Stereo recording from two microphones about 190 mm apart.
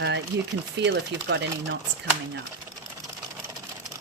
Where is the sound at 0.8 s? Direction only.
70° right (ahead or behind).